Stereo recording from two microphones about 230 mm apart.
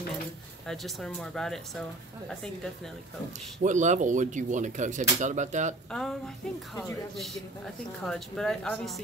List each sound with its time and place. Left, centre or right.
0.7 s a woman's voice: centre
3.6 s speech: right
5.9 s a woman's voice: centre